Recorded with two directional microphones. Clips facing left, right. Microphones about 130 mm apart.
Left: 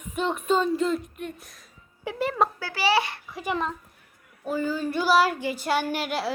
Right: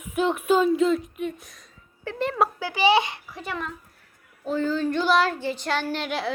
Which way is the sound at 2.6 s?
15° right (ahead or behind).